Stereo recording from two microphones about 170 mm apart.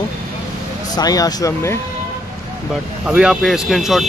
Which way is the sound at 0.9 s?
20° left (ahead or behind).